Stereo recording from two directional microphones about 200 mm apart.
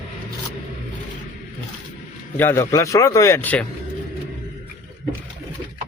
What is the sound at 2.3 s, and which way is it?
A man's voice, 10° left (ahead or behind).